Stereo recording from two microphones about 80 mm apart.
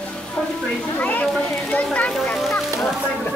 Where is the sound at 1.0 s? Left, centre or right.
Centre.